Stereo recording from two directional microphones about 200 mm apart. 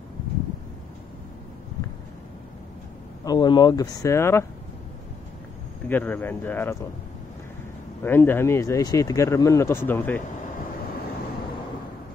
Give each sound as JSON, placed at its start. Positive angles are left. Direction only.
{"t": 3.3, "sound": "speech", "side_deg": 20}
{"t": 5.9, "sound": "speech", "side_deg": 10}
{"t": 8.0, "sound": "speech", "side_deg": 10}